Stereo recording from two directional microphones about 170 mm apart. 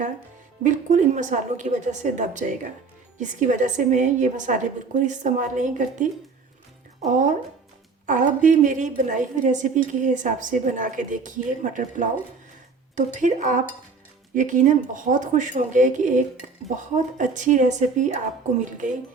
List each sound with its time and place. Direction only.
0.6 s a woman's voice: 45° right (ahead or behind)